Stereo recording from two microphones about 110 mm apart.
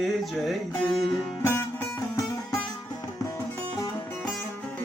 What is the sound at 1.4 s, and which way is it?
Music, 25° left (ahead or behind).